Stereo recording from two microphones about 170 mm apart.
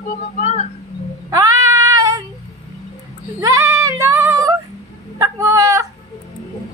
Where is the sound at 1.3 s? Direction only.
20° right (ahead or behind).